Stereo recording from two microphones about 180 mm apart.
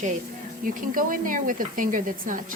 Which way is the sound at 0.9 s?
50° right (ahead or behind).